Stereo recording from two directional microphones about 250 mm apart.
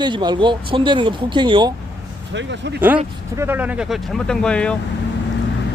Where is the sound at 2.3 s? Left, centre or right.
Right.